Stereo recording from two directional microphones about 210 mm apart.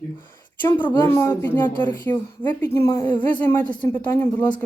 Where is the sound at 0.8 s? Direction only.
10° left (ahead or behind).